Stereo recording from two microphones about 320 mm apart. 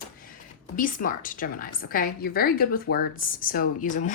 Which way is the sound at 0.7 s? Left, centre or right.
Left.